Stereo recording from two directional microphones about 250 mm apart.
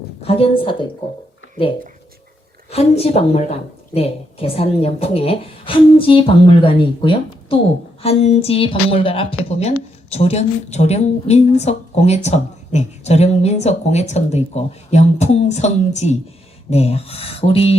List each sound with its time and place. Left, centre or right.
0.2 s a woman's voice: left
2.6 s a woman's voice: left